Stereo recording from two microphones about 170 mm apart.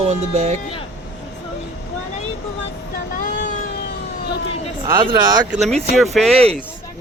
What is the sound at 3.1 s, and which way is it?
Vehicle, 50° left (ahead or behind).